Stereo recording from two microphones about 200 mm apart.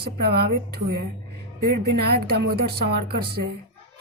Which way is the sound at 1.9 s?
50° right (ahead or behind).